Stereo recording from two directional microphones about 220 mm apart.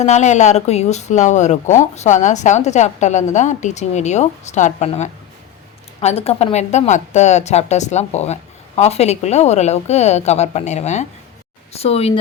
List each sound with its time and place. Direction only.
0.0 s speech: 30° left (ahead or behind)